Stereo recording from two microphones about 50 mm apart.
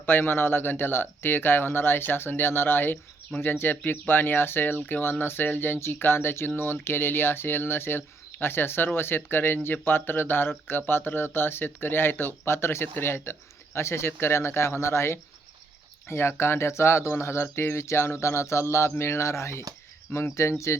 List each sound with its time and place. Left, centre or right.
0.0 s speech: left
13.7 s speech: left